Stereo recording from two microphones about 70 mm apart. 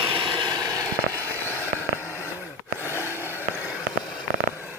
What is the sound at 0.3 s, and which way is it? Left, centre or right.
Vehicle, right.